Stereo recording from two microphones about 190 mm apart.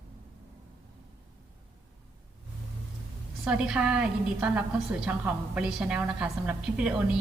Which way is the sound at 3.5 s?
5° right (ahead or behind).